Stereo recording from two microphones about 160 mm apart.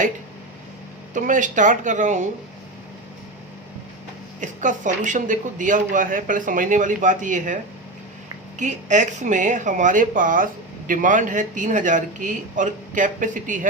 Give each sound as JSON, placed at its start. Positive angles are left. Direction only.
{"t": 1.1, "sound": "speech", "side_deg": -55}
{"t": 4.4, "sound": "speech", "side_deg": -50}